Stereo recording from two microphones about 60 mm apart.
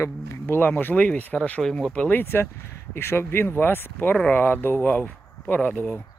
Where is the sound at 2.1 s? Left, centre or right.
Left.